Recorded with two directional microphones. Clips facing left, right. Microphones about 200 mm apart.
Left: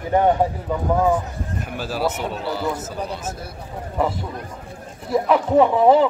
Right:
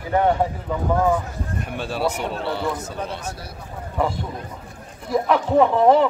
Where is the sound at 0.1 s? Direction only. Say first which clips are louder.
Left 2 dB; 15° left (ahead or behind).